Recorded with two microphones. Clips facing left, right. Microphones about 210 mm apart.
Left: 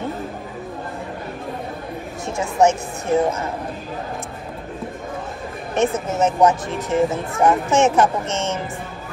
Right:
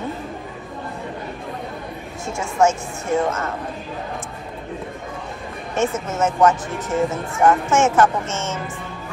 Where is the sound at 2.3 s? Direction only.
20° left (ahead or behind).